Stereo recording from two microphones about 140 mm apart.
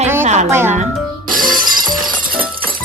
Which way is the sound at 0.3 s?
55° right (ahead or behind).